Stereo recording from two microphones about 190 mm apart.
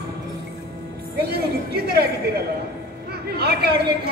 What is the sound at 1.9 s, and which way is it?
Speech, 55° right (ahead or behind).